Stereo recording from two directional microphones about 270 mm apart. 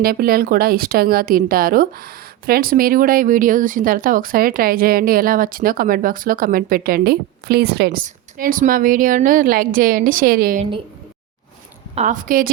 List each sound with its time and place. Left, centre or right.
0.0 s a woman's voice: right
11.9 s a woman's voice: right